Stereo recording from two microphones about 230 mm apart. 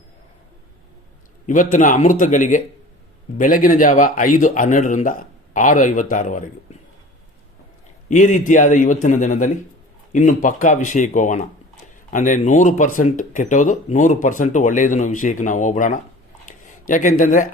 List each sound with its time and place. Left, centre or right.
1.5 s speech: left
8.1 s speech: left